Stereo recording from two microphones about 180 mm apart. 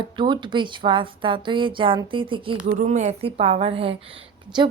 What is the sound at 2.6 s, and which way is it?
A woman's voice, 45° right (ahead or behind).